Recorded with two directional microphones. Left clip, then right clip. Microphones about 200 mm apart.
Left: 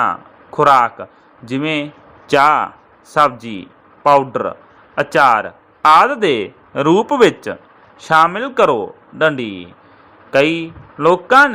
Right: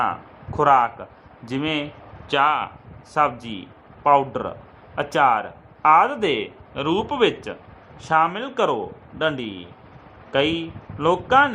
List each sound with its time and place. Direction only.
0.0 s speech: 20° left (ahead or behind)
2.2 s speech: 30° left (ahead or behind)
3.2 s speech: 20° left (ahead or behind)
6.7 s speech: 30° left (ahead or behind)